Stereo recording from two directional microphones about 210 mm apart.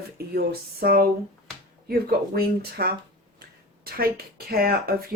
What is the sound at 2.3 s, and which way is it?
Speech, 45° right (ahead or behind).